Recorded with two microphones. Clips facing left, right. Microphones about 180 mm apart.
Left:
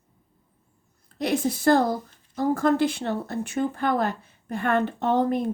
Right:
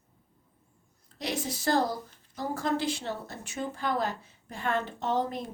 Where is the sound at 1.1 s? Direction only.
55° left (ahead or behind).